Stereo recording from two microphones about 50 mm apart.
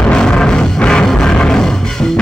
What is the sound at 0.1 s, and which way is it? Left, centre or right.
Music, centre.